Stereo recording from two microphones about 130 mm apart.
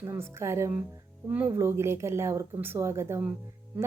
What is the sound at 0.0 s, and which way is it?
Speech, 20° right (ahead or behind).